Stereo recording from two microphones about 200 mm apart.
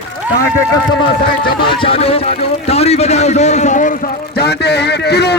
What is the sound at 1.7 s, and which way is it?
A man's voice, 25° left (ahead or behind).